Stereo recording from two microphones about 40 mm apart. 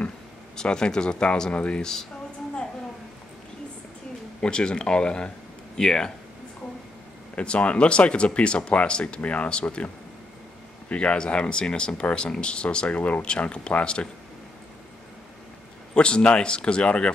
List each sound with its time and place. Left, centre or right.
0.6 s speech: left
1.8 s speech: centre
4.4 s speech: left
7.3 s speech: left
10.9 s speech: left
13.2 s speech: left
15.9 s speech: left